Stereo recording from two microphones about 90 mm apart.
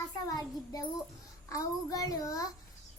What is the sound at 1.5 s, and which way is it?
Child singing, 40° left (ahead or behind).